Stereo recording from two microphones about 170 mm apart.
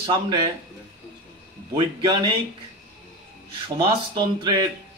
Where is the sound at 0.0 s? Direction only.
30° right (ahead or behind).